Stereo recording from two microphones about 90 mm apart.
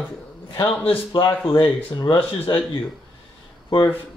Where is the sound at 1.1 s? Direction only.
55° left (ahead or behind).